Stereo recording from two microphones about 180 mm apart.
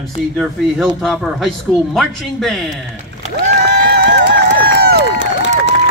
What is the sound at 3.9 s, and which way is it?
Crowd, 65° right (ahead or behind).